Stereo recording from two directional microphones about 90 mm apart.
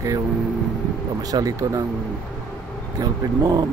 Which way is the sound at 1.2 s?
45° right (ahead or behind).